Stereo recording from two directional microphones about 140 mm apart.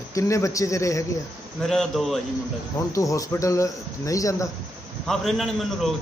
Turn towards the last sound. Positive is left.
turn(degrees=0)  # may be behind; listen again after turning